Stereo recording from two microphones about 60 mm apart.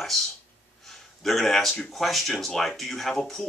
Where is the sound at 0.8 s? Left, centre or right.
Centre.